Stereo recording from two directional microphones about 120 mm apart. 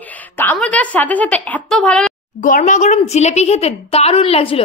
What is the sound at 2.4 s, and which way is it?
A woman's voice, 90° left.